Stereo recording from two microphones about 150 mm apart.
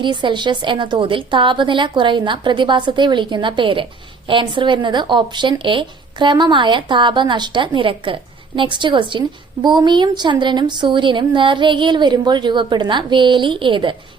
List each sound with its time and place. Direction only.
0.0 s speech: 30° right (ahead or behind)